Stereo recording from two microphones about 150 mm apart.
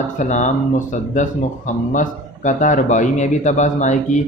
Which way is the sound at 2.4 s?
55° left (ahead or behind).